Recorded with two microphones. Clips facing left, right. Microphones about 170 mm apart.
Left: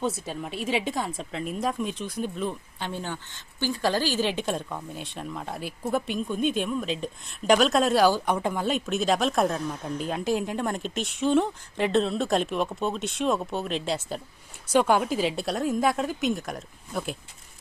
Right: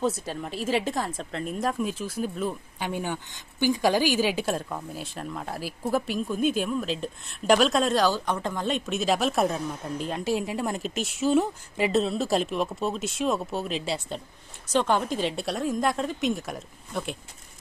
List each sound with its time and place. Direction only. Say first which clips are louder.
0.0 s a woman's voice: right 2 dB; centre (ahead or behind)